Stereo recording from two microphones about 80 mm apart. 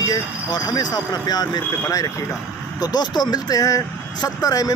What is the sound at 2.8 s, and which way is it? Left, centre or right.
Speech, left.